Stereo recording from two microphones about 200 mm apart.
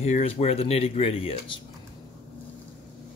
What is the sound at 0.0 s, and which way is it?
Speech, 35° left (ahead or behind).